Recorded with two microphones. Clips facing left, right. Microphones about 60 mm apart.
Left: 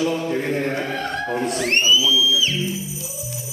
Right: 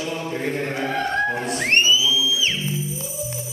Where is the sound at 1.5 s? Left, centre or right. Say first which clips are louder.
Left 2 dB; right.